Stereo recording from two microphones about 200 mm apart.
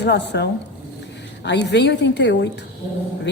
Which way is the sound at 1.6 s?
60° left (ahead or behind).